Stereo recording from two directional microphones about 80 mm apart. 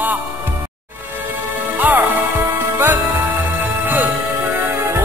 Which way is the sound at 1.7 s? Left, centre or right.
Right.